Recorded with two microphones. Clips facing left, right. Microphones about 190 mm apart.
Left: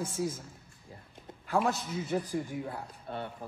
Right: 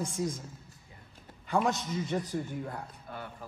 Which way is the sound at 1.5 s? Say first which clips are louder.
Right 1 dB; 5° left (ahead or behind).